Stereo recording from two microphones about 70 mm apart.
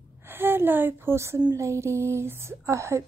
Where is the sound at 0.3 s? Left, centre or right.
Right.